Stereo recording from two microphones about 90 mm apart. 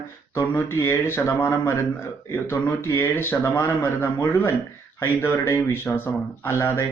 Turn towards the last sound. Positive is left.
turn(degrees=30)  # may be behind; listen again after turning